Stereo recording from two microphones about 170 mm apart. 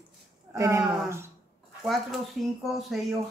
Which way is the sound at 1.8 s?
Centre (ahead or behind).